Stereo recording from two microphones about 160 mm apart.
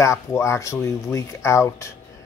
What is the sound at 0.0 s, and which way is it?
Speech, 20° left (ahead or behind).